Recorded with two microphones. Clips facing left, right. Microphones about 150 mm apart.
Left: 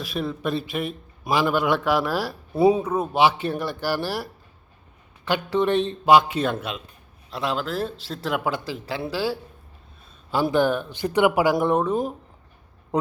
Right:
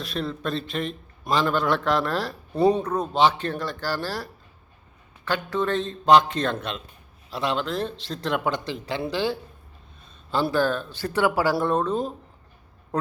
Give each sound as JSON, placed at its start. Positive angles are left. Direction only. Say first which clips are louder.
{"t": 0.0, "sound": "a man's voice", "louder": "left 2 dB", "side_deg": 5}
{"t": 10.3, "sound": "a man's voice", "louder": "left 2 dB", "side_deg": 15}